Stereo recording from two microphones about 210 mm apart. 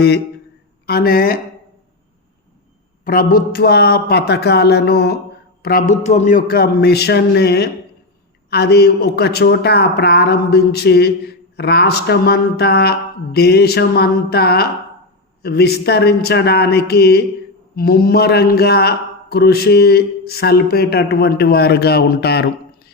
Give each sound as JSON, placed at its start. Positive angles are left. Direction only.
{"t": 0.9, "sound": "a man's voice", "side_deg": 45}
{"t": 3.0, "sound": "a man's voice", "side_deg": 40}